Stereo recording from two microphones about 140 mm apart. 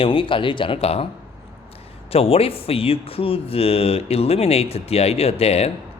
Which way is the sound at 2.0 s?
45° left (ahead or behind).